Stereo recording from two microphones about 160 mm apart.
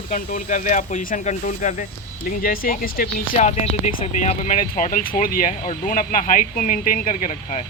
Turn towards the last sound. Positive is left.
turn(degrees=50)  # may be behind; listen again after turning